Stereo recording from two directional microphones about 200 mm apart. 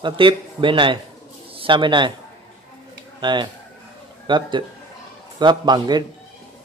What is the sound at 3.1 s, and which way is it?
A man's voice, 20° right (ahead or behind).